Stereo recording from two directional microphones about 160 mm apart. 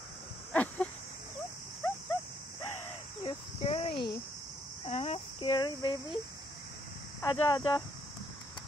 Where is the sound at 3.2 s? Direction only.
35° left (ahead or behind).